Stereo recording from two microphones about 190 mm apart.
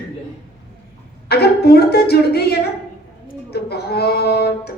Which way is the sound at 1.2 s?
55° left (ahead or behind).